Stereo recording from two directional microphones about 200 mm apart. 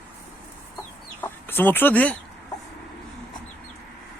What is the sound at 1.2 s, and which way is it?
Chicken, 10° left (ahead or behind).